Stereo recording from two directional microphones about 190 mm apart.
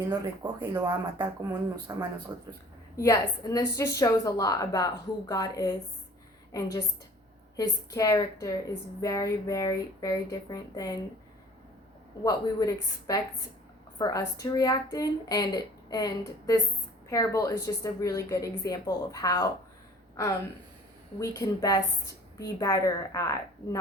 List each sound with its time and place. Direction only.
0.1 s speech: 20° right (ahead or behind)
2.9 s speech: 15° left (ahead or behind)
12.2 s speech: 20° left (ahead or behind)
21.2 s speech: 20° left (ahead or behind)